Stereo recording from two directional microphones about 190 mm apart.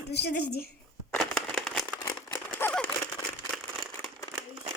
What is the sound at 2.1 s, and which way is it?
Crumpling, 10° left (ahead or behind).